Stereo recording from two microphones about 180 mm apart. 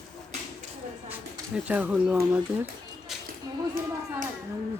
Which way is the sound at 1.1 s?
10° right (ahead or behind).